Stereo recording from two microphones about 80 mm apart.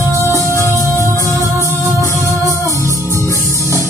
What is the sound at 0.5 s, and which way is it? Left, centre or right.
Music, left.